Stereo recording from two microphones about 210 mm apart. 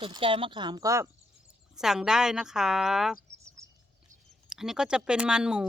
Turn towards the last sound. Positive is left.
turn(degrees=-5)  # may be behind; listen again after turning